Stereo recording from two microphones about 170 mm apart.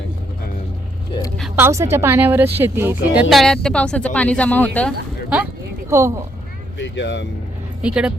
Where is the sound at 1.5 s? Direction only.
15° right (ahead or behind).